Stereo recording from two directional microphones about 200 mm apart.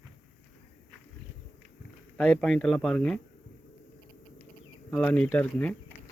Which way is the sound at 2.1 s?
5° left (ahead or behind).